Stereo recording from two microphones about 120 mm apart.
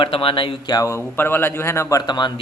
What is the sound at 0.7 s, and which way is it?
Speech, 25° left (ahead or behind).